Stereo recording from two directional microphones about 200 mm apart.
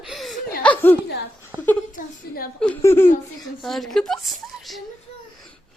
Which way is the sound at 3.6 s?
Centre (ahead or behind).